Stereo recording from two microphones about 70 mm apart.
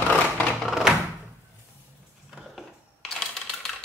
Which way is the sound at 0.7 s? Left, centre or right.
Centre.